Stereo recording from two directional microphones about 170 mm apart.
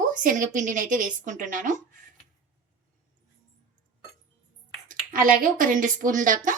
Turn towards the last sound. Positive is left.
turn(degrees=-50)  # may be behind; listen again after turning